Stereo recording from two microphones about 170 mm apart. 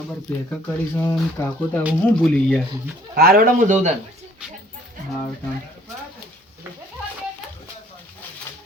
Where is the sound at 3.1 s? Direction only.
60° right (ahead or behind); by 4.0 s 45° right (ahead or behind).